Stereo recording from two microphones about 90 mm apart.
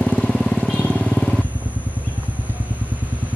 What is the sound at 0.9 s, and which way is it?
Vehicle, 10° left (ahead or behind).